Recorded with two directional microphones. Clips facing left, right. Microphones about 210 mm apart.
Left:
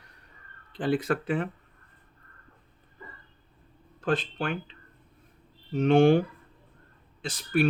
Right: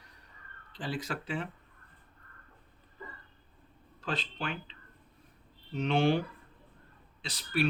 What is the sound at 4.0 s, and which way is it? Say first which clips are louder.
Speech: left 8 dB; 50° left (ahead or behind).